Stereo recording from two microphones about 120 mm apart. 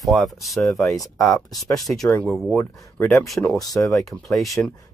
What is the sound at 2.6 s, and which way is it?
Speech, 20° left (ahead or behind).